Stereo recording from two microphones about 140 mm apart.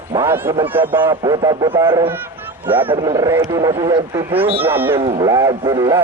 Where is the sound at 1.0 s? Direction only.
30° right (ahead or behind).